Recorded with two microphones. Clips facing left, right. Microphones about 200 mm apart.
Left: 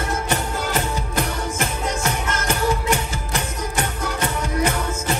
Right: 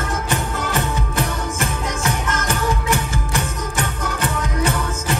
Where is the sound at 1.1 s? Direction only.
10° left (ahead or behind).